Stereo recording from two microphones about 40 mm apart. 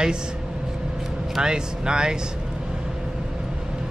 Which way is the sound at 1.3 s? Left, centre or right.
Centre.